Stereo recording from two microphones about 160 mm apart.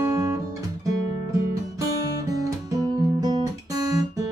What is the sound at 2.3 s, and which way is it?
Guitar, 20° right (ahead or behind).